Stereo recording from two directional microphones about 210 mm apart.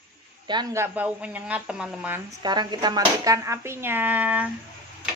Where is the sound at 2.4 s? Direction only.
20° right (ahead or behind).